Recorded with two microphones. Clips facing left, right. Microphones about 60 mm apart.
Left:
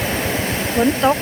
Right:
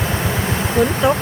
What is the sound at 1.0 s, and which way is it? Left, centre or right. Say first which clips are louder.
Speech: even; centre.